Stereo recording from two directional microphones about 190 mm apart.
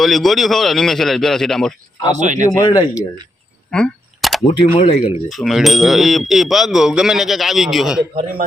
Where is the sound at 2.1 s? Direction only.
40° right (ahead or behind).